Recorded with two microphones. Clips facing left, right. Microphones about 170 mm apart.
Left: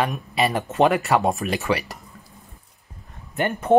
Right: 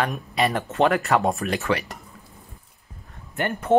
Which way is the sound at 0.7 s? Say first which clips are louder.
Left 3 dB; 15° left (ahead or behind).